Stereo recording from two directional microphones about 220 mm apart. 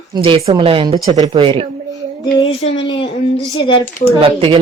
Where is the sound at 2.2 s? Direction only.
25° left (ahead or behind).